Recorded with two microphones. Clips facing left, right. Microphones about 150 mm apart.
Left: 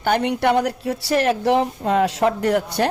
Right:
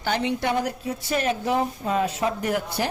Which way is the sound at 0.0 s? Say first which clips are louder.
Left 6 dB; 55° left (ahead or behind).